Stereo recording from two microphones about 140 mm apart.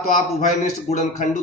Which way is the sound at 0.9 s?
65° left (ahead or behind).